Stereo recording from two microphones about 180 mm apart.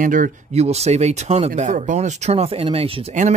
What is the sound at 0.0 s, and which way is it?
Speech, 45° right (ahead or behind).